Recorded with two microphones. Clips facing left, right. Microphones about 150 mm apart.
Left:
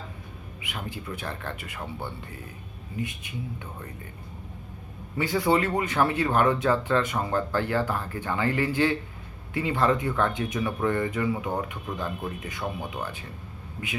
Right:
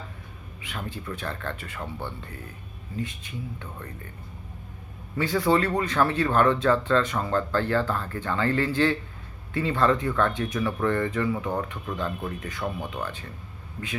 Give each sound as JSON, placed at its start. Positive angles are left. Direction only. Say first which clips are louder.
{"t": 0.6, "sound": "speech", "louder": "right 1 dB", "side_deg": 15}
{"t": 5.1, "sound": "speech", "louder": "right 1 dB", "side_deg": 15}